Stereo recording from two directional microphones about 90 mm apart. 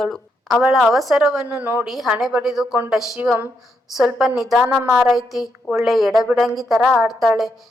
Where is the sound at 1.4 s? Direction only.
20° right (ahead or behind).